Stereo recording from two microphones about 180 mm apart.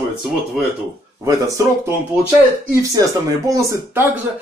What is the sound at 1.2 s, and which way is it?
Speech, 15° right (ahead or behind).